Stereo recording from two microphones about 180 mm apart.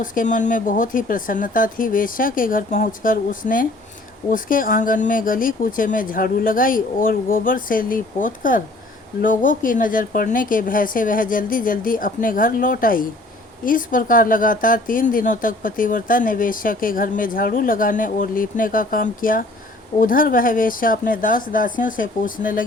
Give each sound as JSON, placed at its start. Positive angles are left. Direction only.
{"t": 0.0, "sound": "speech", "side_deg": 50}